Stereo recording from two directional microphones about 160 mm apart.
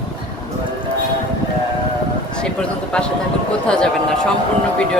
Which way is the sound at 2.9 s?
5° left (ahead or behind).